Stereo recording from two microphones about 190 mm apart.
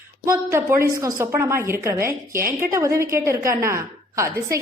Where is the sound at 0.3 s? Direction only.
15° right (ahead or behind).